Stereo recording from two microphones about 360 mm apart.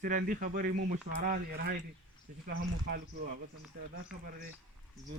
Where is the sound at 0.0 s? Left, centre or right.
Right.